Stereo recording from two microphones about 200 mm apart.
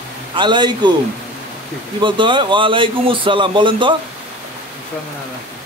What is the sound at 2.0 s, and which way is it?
Speech, 25° right (ahead or behind).